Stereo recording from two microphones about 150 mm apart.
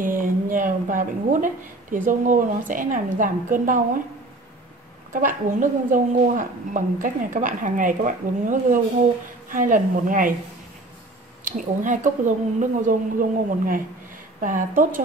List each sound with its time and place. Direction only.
0.0 s a woman's voice: 65° right (ahead or behind)
5.1 s a woman's voice: 60° right (ahead or behind)
11.4 s a woman's voice: 60° right (ahead or behind)